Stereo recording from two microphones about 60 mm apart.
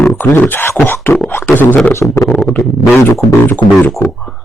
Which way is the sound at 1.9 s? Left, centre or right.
Left.